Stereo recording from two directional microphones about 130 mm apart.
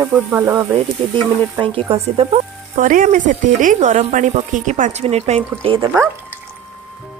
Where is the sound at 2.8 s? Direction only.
90° right; by 5.4 s 55° right (ahead or behind).